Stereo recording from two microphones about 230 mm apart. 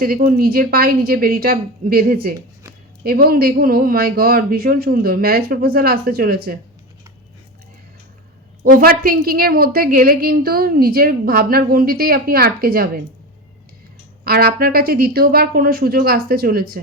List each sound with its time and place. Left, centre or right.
0.0 s a woman's voice: right
8.6 s a woman's voice: right
14.3 s a woman's voice: right